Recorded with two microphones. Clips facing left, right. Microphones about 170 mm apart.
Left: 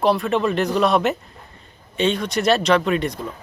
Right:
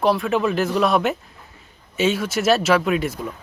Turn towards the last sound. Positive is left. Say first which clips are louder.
# even
turn(degrees=-5)  # may be behind; listen again after turning